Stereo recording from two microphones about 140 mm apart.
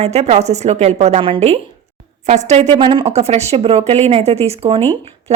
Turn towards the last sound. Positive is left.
turn(degrees=-50)  # may be behind; listen again after turning